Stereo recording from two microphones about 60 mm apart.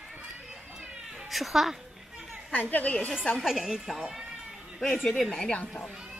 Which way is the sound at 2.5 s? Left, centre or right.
Left.